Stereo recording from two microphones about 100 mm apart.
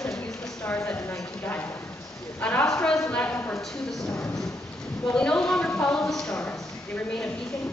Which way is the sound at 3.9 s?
5° left (ahead or behind).